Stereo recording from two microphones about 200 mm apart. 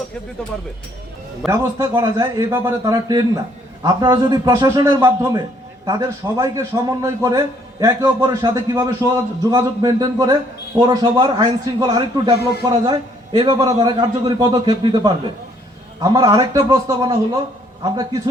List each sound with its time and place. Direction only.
1.5 s a man's voice: 15° right (ahead or behind)